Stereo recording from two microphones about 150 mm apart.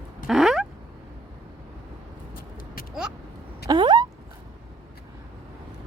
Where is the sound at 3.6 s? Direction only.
30° right (ahead or behind).